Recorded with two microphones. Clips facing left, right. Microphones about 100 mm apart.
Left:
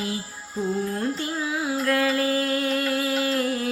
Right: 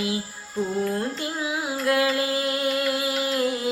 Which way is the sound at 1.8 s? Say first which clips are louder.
Right 1 dB; 15° right (ahead or behind).